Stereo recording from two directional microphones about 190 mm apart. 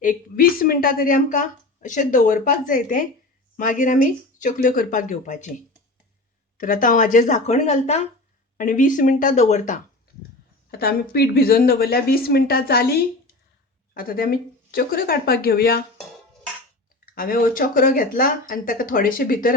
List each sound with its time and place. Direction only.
0.0 s a woman's voice: 45° left (ahead or behind)
6.6 s a woman's voice: 45° left (ahead or behind)
10.7 s a woman's voice: 55° left (ahead or behind)
17.2 s a woman's voice: 50° left (ahead or behind)